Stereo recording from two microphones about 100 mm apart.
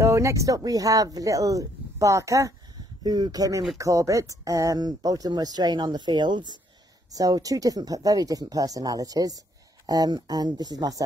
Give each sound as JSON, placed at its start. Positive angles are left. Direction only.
{"t": 0.0, "sound": "speech", "side_deg": -30}
{"t": 3.0, "sound": "speech", "side_deg": -40}
{"t": 7.1, "sound": "speech", "side_deg": -35}